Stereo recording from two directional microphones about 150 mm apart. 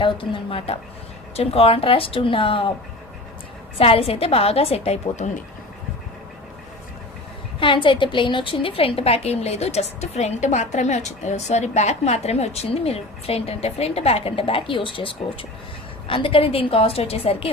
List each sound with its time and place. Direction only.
0.0 s a woman's voice: 35° left (ahead or behind)
3.8 s a woman's voice: 40° left (ahead or behind)
7.6 s a woman's voice: 35° left (ahead or behind)